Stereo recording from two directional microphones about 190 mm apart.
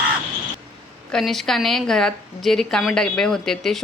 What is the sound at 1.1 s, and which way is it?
Speech, centre (ahead or behind).